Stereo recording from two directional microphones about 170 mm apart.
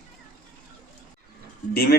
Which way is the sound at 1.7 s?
65° left (ahead or behind).